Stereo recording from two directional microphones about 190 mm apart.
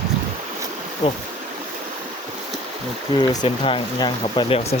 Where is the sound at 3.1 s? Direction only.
25° left (ahead or behind).